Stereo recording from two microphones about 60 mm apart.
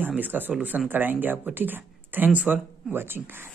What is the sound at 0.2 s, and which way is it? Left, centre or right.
Speech, right.